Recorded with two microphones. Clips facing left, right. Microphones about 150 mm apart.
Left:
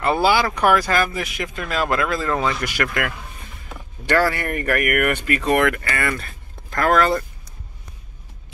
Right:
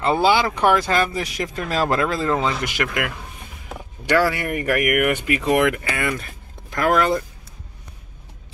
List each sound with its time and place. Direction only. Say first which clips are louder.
0.0 s speech: even; 20° right (ahead or behind)